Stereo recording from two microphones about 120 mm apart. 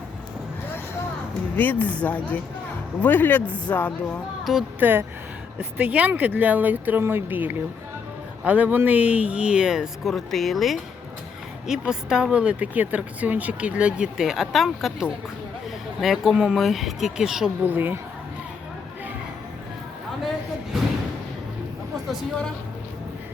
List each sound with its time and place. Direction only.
1.5 s speech: 15° left (ahead or behind)
4.8 s speech: 15° right (ahead or behind)
17.6 s speech: 15° right (ahead or behind)